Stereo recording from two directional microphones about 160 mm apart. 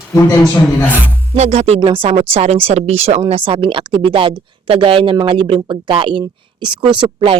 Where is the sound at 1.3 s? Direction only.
40° right (ahead or behind).